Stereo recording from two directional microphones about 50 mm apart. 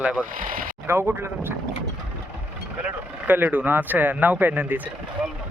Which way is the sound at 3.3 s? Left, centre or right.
Right.